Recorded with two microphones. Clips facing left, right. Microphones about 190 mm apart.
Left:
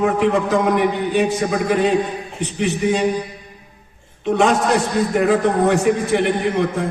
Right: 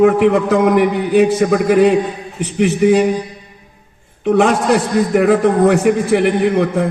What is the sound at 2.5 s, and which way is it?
Speech, 65° right (ahead or behind).